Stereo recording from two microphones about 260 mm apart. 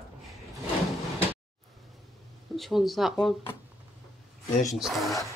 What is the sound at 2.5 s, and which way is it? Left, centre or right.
Speech, centre.